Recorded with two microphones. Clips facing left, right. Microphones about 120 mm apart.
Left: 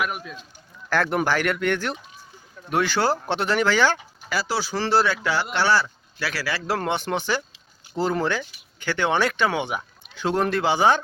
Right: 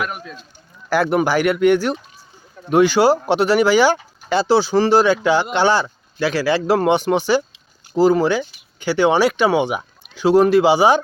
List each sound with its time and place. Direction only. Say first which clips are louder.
0.0 s speech: right 2 dB; 5° left (ahead or behind)
0.9 s speech: right 5 dB; 5° right (ahead or behind)
3.9 s speech: right 9 dB; 25° right (ahead or behind)